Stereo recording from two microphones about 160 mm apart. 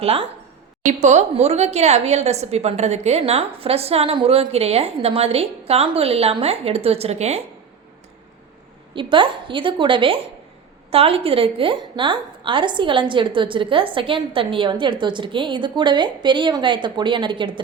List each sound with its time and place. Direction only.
0.0 s a woman's voice: 35° right (ahead or behind)
0.9 s a woman's voice: 50° right (ahead or behind)
9.0 s a woman's voice: 30° right (ahead or behind)